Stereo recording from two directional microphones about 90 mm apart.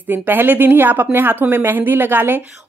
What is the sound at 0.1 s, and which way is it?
A woman's voice, 20° right (ahead or behind).